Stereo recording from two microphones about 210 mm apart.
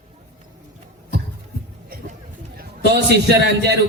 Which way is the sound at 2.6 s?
55° right (ahead or behind).